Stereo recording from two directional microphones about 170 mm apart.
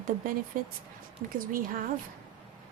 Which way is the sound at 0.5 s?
55° right (ahead or behind).